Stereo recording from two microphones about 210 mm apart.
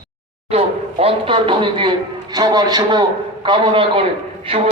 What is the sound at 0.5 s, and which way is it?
A man's voice, 25° right (ahead or behind).